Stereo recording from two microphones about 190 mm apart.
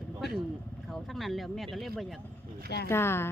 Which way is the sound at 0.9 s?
Centre (ahead or behind).